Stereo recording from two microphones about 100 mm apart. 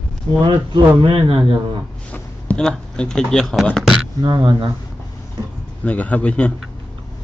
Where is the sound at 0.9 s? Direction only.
65° right (ahead or behind).